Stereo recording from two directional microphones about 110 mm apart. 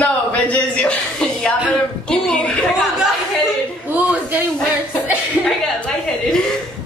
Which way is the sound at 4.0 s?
15° right (ahead or behind).